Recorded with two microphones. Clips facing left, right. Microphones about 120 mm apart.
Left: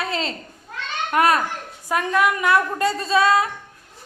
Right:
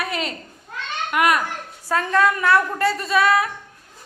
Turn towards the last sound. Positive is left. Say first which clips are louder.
# left 1 dB
turn(degrees=25)  # may be behind; listen again after turning